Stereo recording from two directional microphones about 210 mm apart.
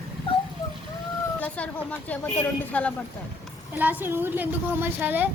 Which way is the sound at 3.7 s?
10° right (ahead or behind).